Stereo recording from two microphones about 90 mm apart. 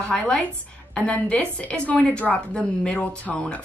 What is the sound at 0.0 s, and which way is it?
A woman's voice, 10° left (ahead or behind).